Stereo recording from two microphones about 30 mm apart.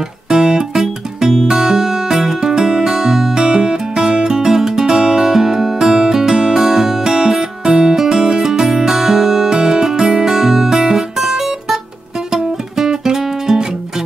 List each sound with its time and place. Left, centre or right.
0.3 s music: right
2.8 s music: centre
4.5 s music: centre
10.2 s music: centre